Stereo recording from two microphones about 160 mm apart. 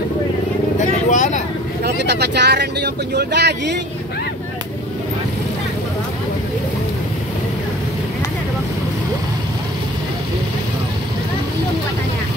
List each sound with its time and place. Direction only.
0.7 s vehicle: 50° left (ahead or behind)
1.9 s speech: 90° right